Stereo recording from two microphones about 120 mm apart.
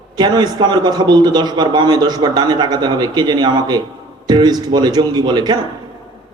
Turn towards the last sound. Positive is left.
turn(degrees=-35)  # may be behind; listen again after turning